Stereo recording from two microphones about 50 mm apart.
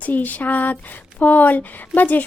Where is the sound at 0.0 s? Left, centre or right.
Left.